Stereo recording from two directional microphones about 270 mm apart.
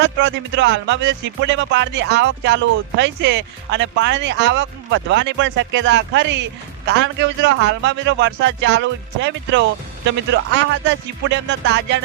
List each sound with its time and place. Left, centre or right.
0.0 s speech: right